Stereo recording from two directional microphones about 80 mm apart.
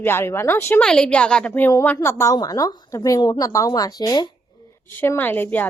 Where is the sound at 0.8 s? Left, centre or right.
Centre.